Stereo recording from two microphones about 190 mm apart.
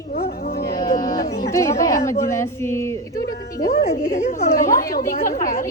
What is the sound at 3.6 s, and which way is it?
A woman's voice, 50° left (ahead or behind).